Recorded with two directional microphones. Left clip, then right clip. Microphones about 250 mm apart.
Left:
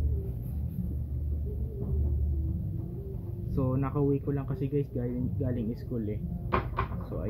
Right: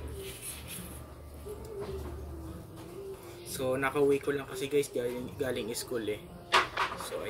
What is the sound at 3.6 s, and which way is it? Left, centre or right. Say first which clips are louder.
Speech: right 4 dB; right.